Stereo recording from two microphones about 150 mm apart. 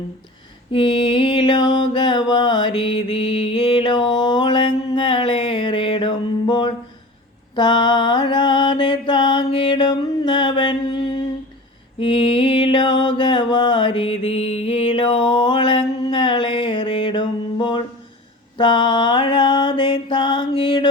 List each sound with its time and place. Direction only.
0.7 s mantra: 30° left (ahead or behind)
11.9 s music: 35° left (ahead or behind)
18.5 s mantra: 30° left (ahead or behind)
20.5 s music: 35° left (ahead or behind)